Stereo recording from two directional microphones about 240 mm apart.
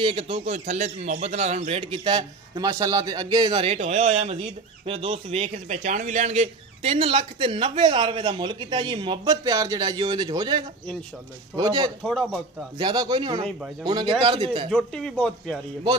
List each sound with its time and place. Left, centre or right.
0.0 s a man's voice: right
12.0 s speech: centre
12.7 s a man's voice: centre
14.7 s speech: centre